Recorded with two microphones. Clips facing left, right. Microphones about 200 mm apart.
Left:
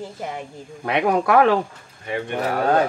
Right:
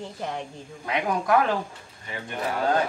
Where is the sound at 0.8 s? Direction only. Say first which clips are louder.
Left 5 dB; 70° left (ahead or behind).